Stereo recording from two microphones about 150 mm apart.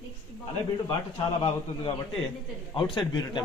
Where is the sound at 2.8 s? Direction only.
30° left (ahead or behind).